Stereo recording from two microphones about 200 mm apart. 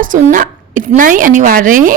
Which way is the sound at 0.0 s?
40° right (ahead or behind).